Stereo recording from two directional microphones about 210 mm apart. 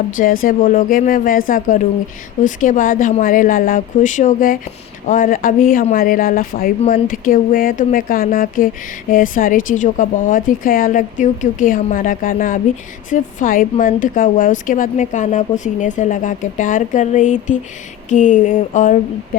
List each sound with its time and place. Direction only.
0.2 s speech: 40° left (ahead or behind)